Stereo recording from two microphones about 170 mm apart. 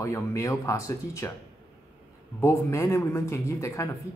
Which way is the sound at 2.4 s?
15° left (ahead or behind).